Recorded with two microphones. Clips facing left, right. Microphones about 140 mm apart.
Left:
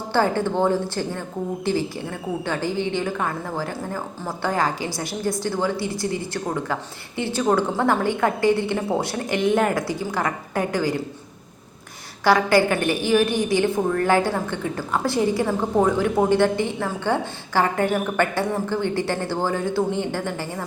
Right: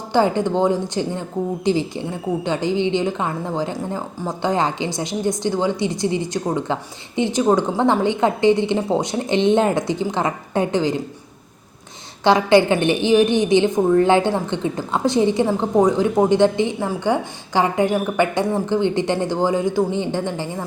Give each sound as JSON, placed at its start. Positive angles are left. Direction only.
{"t": 0.1, "sound": "a woman's voice", "side_deg": -15}
{"t": 12.2, "sound": "a woman's voice", "side_deg": -20}